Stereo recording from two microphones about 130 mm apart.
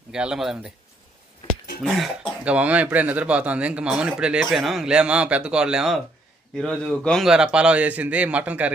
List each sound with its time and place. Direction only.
0.1 s speech: 5° right (ahead or behind)
1.8 s speech: centre (ahead or behind)
2.4 s a man's voice: 10° right (ahead or behind)